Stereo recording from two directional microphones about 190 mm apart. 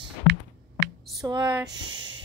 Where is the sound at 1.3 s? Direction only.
15° right (ahead or behind).